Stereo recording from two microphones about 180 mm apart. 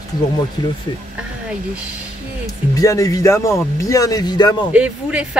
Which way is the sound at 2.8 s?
20° left (ahead or behind).